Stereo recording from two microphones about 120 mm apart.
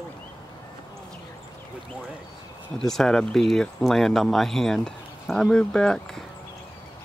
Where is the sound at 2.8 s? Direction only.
5° left (ahead or behind).